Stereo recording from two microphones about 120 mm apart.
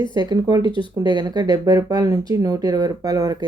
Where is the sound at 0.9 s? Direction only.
35° right (ahead or behind).